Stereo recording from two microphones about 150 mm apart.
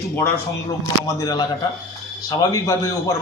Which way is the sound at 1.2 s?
25° left (ahead or behind).